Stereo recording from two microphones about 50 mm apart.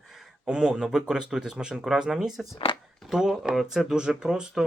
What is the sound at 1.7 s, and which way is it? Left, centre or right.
Speech, centre.